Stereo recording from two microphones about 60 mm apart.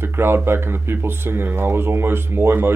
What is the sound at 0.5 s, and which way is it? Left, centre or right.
Speech, right.